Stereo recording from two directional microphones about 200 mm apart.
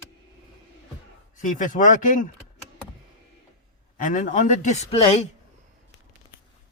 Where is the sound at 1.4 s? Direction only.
40° left (ahead or behind).